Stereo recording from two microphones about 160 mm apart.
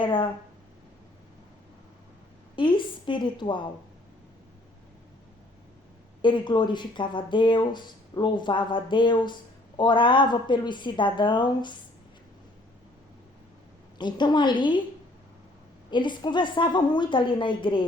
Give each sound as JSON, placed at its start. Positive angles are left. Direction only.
{"t": 0.0, "sound": "a woman's voice", "side_deg": 30}
{"t": 2.6, "sound": "a woman's voice", "side_deg": 30}
{"t": 6.2, "sound": "speech", "side_deg": 30}
{"t": 14.0, "sound": "speech", "side_deg": 30}
{"t": 15.9, "sound": "a woman's voice", "side_deg": 30}